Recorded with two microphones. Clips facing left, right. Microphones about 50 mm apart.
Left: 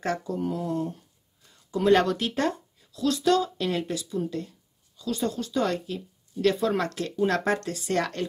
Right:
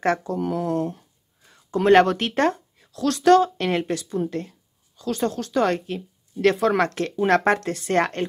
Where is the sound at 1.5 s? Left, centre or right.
Right.